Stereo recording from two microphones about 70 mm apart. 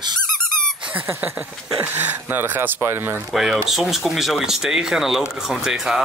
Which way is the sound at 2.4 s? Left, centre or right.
Right.